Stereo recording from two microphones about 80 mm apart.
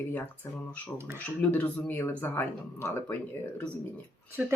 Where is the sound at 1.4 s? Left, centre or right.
Left.